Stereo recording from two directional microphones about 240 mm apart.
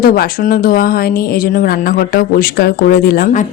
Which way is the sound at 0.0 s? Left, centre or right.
Left.